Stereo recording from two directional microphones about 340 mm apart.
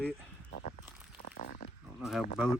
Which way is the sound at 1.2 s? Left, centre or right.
Left.